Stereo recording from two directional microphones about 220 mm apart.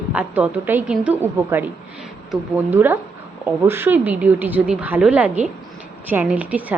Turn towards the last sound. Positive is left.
turn(degrees=-5)  # may be behind; listen again after turning